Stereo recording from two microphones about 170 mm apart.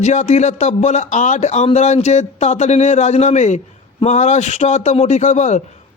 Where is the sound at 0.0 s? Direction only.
45° left (ahead or behind).